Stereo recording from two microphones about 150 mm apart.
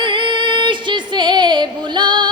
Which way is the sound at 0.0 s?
35° right (ahead or behind).